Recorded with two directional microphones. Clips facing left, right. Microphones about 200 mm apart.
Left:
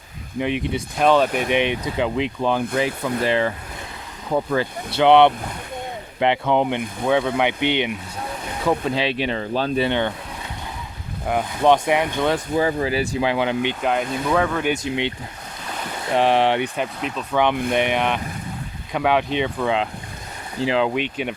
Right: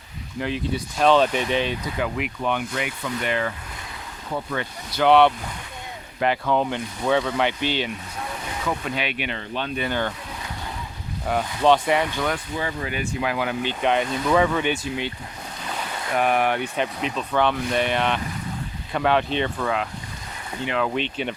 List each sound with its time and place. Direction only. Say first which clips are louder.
0.3 s speech: left 3 dB; 20° left (ahead or behind)
4.5 s speech: left 6 dB; 25° left (ahead or behind)
8.6 s speech: left 7 dB; 30° left (ahead or behind)
11.3 s speech: left 2 dB; 15° left (ahead or behind)
12.2 s speech: left 6 dB; 30° left (ahead or behind)
13.8 s speech: right 4 dB; centre (ahead or behind)
16.1 s speech: left 4 dB; 25° left (ahead or behind)
16.7 s speech: even; centre (ahead or behind)
17.3 s speech: left 3 dB; 15° left (ahead or behind)
20.6 s speech: left 5 dB; 30° left (ahead or behind)
20.9 s speech: left 2 dB; 10° left (ahead or behind)